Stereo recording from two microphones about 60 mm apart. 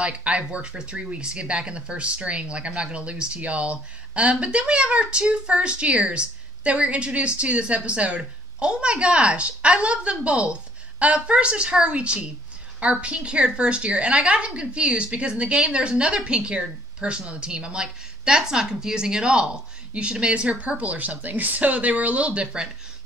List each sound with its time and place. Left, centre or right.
0.0 s a woman's voice: centre